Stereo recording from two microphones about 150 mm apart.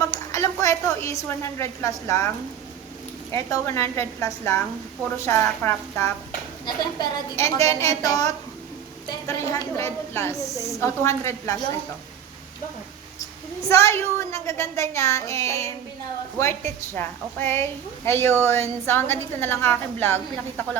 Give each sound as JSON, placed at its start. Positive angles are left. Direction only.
{"t": 0.1, "sound": "speech", "side_deg": 20}
{"t": 3.3, "sound": "a woman's voice", "side_deg": 20}
{"t": 6.7, "sound": "a woman's voice", "side_deg": 30}
{"t": 13.7, "sound": "a woman's voice", "side_deg": 20}